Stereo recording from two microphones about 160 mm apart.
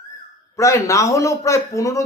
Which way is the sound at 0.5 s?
20° left (ahead or behind).